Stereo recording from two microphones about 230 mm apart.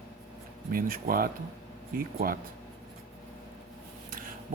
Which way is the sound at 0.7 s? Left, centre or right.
Right.